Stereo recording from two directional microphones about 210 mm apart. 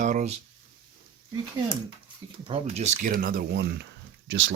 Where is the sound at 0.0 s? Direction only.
35° right (ahead or behind).